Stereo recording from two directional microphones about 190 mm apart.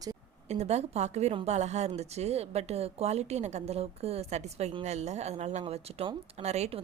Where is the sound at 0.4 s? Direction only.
35° right (ahead or behind).